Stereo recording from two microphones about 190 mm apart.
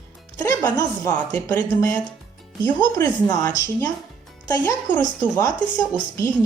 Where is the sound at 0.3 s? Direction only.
20° left (ahead or behind).